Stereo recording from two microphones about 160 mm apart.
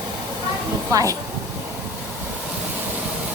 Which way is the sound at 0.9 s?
20° right (ahead or behind).